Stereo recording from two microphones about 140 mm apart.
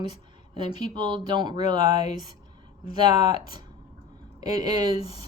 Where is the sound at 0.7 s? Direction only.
30° right (ahead or behind).